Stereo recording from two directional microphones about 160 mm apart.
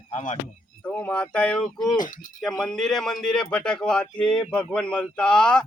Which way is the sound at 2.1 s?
55° left (ahead or behind).